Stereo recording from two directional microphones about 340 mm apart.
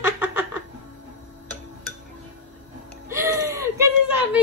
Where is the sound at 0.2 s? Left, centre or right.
Centre.